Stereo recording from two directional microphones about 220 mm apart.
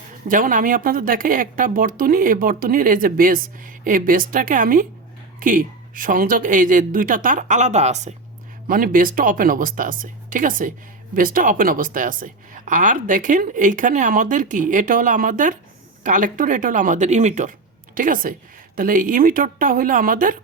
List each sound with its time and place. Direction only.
0.3 s a woman's voice: 35° right (ahead or behind)